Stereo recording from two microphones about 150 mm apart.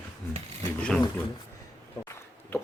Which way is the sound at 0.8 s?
5° left (ahead or behind).